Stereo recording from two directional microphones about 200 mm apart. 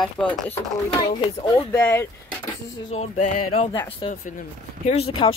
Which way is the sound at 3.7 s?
25° left (ahead or behind).